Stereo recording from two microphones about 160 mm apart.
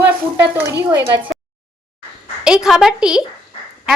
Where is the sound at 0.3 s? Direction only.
15° right (ahead or behind).